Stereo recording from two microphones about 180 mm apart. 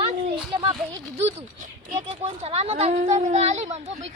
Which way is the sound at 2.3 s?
35° right (ahead or behind).